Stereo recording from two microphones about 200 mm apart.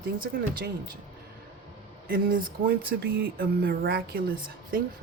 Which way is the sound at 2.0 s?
45° right (ahead or behind).